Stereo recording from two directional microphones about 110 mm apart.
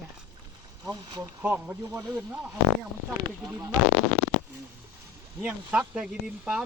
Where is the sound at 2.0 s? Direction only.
30° right (ahead or behind).